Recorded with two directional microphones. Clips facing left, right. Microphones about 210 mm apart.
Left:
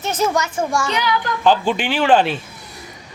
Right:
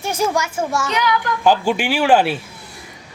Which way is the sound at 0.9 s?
30° left (ahead or behind).